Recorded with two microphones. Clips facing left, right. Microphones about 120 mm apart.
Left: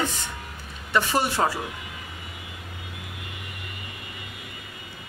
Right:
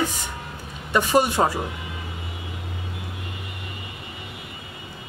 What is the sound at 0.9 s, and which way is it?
Speech, 15° right (ahead or behind).